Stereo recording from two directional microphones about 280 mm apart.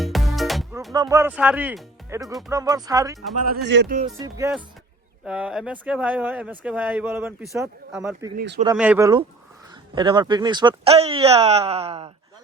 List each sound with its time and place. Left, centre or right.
0.0 s music: centre
0.9 s speech: centre
3.4 s speech: right
4.2 s speech: centre